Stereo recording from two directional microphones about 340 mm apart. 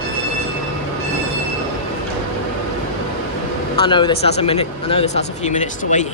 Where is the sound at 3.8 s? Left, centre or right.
Centre.